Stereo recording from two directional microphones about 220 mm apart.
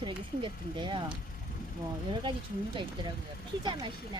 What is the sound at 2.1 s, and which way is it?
Speech, 20° right (ahead or behind).